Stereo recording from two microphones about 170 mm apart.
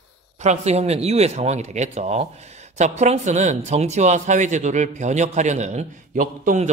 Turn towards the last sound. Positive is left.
turn(degrees=-50)  # may be behind; listen again after turning